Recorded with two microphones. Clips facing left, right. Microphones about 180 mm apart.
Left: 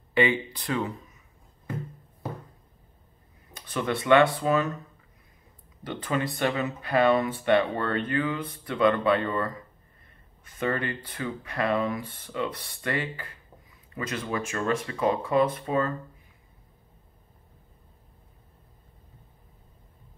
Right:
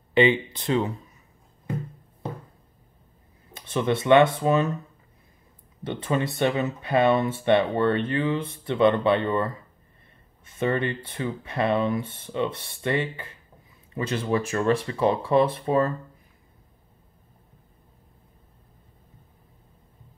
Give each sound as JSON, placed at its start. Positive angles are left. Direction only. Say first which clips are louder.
{"t": 0.1, "sound": "speech", "louder": "right 4 dB", "side_deg": -25}
{"t": 3.5, "sound": "speech", "louder": "right 4 dB", "side_deg": -25}
{"t": 5.9, "sound": "speech", "louder": "right 3 dB", "side_deg": -25}